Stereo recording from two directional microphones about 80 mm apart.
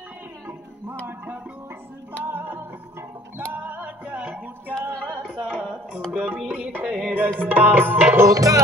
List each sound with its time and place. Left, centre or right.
1.0 s music: right
8.3 s music: right